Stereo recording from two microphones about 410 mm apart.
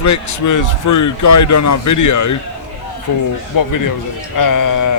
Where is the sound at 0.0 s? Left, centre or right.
Left.